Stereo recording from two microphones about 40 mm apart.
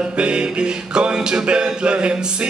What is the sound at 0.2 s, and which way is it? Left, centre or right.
Music, right.